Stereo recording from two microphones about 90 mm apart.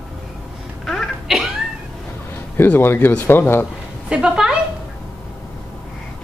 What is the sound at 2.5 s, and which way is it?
Speech, 20° left (ahead or behind).